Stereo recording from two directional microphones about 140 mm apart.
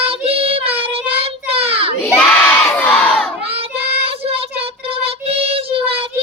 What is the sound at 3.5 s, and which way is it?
Child singing, 45° right (ahead or behind).